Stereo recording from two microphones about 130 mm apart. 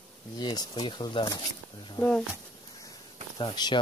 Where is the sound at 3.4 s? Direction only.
35° left (ahead or behind).